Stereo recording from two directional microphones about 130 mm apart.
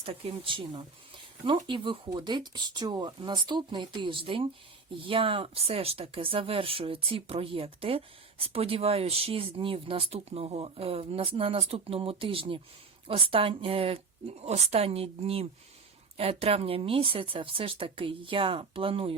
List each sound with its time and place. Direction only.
0.0 s speech: 45° right (ahead or behind)